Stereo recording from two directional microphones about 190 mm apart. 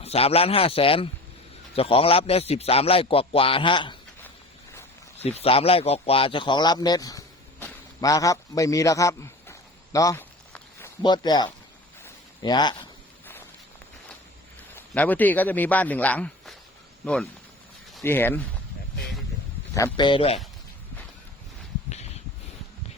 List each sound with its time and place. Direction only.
0.0 s a man's voice: 30° left (ahead or behind)
5.2 s speech: 35° left (ahead or behind); by 10.2 s 15° left (ahead or behind)
10.5 s a sound: 15° left (ahead or behind)
14.8 s a man's voice: 10° left (ahead or behind)
18.0 s speech: 10° left (ahead or behind)
19.7 s a man's voice: 20° left (ahead or behind)